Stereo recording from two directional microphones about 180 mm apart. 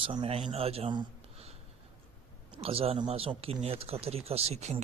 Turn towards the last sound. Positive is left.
turn(degrees=-35)  # may be behind; listen again after turning